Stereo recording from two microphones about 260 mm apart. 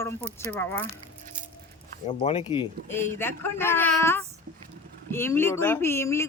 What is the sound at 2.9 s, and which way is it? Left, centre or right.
Speech, centre.